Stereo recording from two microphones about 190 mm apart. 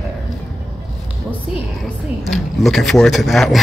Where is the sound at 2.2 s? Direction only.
Centre (ahead or behind).